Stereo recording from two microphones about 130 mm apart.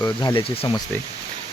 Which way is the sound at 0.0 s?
25° left (ahead or behind).